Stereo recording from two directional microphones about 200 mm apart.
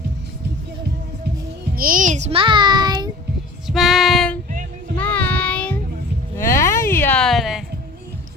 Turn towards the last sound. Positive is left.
turn(degrees=0)  # may be behind; listen again after turning